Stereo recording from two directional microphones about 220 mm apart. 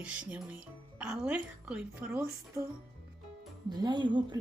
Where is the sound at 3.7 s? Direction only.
20° right (ahead or behind).